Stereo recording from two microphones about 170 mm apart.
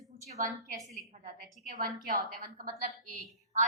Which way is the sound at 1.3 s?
60° right (ahead or behind).